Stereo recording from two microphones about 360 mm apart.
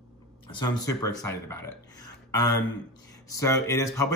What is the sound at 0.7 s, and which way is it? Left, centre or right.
Speech, centre.